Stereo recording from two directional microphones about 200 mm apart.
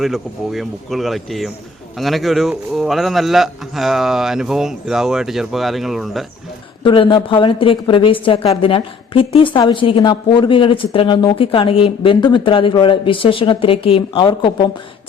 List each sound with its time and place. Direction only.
0.0 s a man's voice: centre (ahead or behind)
6.8 s a woman's voice: 25° left (ahead or behind)